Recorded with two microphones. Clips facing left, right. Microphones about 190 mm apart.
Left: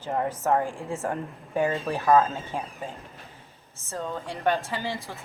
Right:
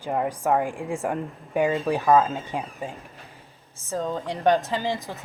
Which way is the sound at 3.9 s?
15° right (ahead or behind).